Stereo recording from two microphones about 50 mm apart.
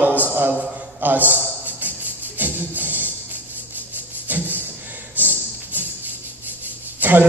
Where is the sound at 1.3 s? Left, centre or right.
Right.